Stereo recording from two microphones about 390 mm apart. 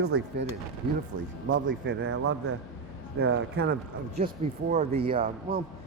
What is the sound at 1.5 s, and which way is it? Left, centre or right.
Speech, right.